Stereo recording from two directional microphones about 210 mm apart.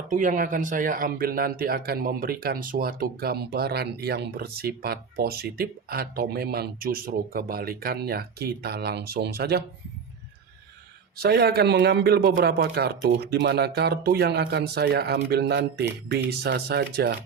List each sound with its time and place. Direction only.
0.1 s speech: 35° right (ahead or behind)
11.2 s speech: 50° right (ahead or behind)